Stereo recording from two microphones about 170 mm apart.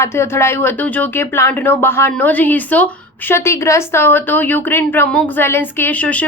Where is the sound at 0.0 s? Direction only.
15° left (ahead or behind).